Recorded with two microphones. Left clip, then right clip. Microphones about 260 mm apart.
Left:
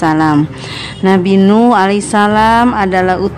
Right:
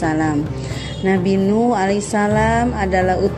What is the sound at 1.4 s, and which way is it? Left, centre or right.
Speech, left.